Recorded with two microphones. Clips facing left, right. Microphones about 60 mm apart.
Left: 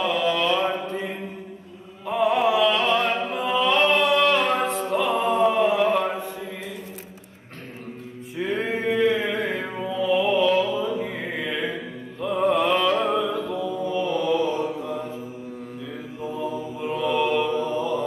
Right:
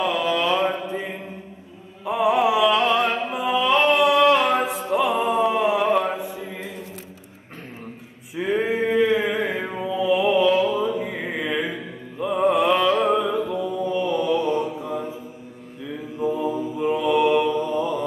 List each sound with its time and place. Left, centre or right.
0.0 s mantra: centre
2.0 s music: centre
5.3 s a sound: centre
5.9 s chant: centre
8.4 s male singing: centre
9.2 s mantra: centre
10.8 s music: right
12.2 s mantra: centre
13.2 s music: centre
13.9 s mantra: right
16.2 s mantra: centre
17.7 s mantra: right